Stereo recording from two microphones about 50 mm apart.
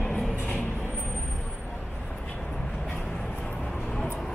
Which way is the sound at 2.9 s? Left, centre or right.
Centre.